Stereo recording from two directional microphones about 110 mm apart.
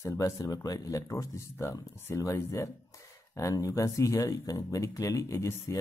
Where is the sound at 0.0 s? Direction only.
30° left (ahead or behind).